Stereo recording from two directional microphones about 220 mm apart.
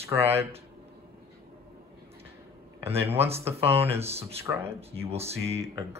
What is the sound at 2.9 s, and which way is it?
Speech, 25° right (ahead or behind).